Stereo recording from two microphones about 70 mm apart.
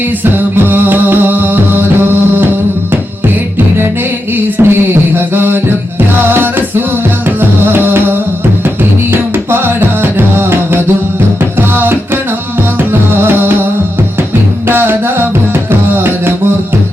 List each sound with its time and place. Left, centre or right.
0.3 s music: right
4.4 s a sound: right
5.1 s music: right
9.3 s music: right
14.7 s music: right